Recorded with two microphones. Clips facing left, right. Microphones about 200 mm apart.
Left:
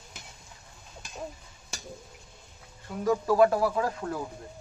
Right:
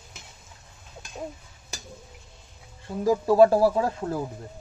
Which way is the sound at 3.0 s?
25° right (ahead or behind).